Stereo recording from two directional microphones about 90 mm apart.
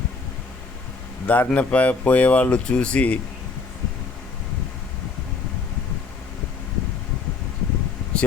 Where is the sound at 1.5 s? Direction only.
15° left (ahead or behind).